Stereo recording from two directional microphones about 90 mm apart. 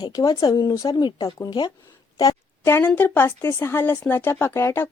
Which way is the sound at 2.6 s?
25° left (ahead or behind).